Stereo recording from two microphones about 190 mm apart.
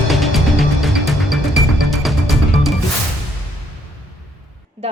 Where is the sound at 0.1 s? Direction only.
Centre (ahead or behind).